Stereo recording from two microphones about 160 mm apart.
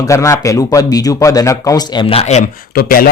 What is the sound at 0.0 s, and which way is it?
Speech, 20° left (ahead or behind).